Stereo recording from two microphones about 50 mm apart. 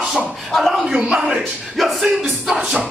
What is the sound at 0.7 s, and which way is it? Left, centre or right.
Speech, centre.